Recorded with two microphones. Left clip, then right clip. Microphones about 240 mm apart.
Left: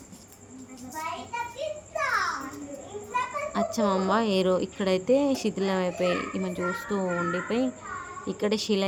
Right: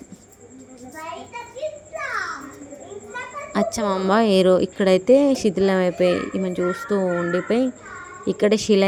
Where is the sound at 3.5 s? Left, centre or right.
Right.